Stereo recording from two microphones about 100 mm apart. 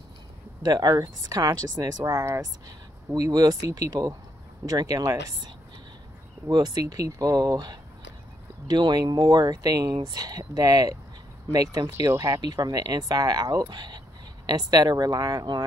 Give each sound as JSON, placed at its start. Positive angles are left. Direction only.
{"t": 0.6, "sound": "speech", "side_deg": -45}
{"t": 6.5, "sound": "speech", "side_deg": -45}